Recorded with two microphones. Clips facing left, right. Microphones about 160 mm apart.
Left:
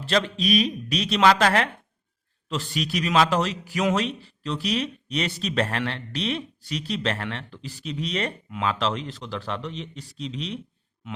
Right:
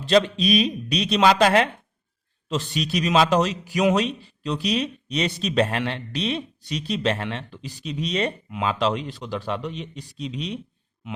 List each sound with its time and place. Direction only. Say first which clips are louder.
0.0 s a man's voice: right 5 dB; 15° right (ahead or behind)